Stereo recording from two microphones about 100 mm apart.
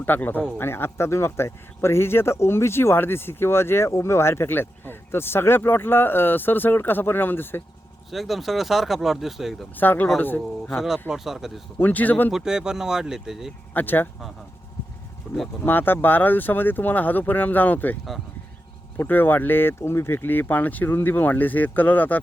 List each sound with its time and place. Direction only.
0.0 s speech: 20° left (ahead or behind)
8.1 s speech: centre (ahead or behind)
9.7 s speech: 20° left (ahead or behind)
11.1 s speech: 5° right (ahead or behind)
11.8 s a man's voice: 15° left (ahead or behind)
12.3 s speech: 5° right (ahead or behind)
13.7 s speech: 20° left (ahead or behind)
15.3 s a sound: 5° left (ahead or behind)
15.6 s speech: 20° left (ahead or behind)
18.9 s speech: 20° left (ahead or behind)